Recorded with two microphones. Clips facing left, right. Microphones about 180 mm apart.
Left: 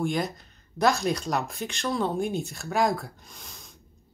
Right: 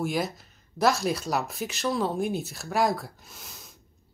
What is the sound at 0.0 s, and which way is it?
Speech, 5° right (ahead or behind).